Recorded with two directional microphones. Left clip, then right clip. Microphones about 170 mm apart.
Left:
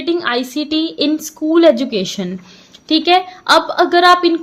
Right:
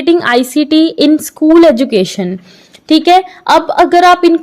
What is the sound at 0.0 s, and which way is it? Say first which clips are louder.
A woman's voice: right 8 dB; 50° right (ahead or behind).